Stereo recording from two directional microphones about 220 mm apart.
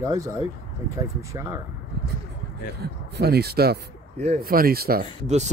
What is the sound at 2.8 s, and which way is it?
Speech, 45° right (ahead or behind).